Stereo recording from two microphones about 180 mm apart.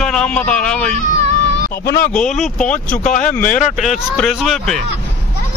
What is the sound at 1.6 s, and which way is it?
Speech, 55° left (ahead or behind).